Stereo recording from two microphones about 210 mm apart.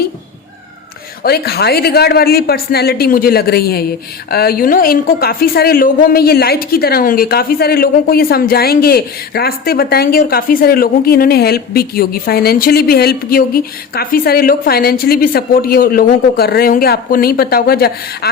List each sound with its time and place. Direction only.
1.2 s a woman's voice: 50° left (ahead or behind)